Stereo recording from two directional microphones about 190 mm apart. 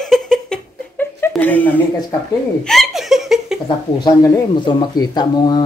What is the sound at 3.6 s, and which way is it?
Speech, 25° left (ahead or behind).